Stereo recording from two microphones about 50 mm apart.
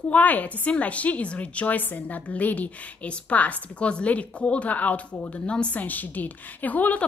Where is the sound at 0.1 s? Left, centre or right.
Left.